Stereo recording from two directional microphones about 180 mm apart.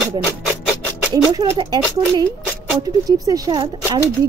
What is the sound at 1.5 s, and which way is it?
A woman's voice, 25° right (ahead or behind).